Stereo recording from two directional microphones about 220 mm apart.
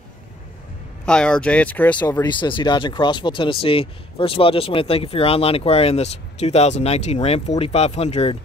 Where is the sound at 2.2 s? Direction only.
20° left (ahead or behind).